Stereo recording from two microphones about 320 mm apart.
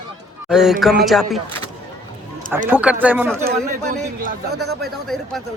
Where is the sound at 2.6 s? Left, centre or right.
Centre.